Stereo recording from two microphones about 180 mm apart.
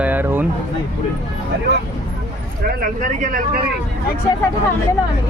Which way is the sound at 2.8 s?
50° right (ahead or behind).